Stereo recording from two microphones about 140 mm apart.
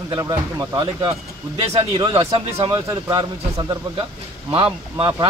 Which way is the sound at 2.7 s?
25° right (ahead or behind).